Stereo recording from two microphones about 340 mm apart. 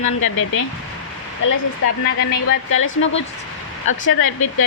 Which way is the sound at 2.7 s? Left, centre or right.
Left.